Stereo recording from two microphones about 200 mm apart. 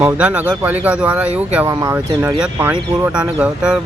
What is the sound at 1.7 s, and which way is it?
Speech, 15° right (ahead or behind).